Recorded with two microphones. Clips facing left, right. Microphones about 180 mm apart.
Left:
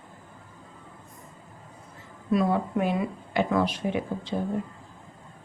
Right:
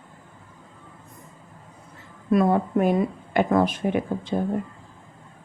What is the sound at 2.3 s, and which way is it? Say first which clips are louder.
Speech: right 4 dB; 50° right (ahead or behind).